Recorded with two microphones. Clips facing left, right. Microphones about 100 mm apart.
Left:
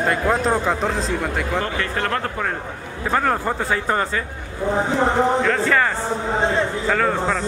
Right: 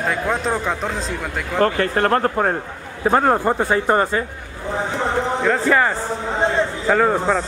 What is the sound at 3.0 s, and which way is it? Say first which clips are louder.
Speech: right 4 dB; 25° right (ahead or behind).